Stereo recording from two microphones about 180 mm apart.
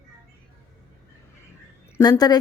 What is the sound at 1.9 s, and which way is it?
Speech, 20° left (ahead or behind).